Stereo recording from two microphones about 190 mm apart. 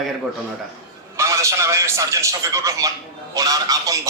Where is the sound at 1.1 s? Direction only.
15° right (ahead or behind).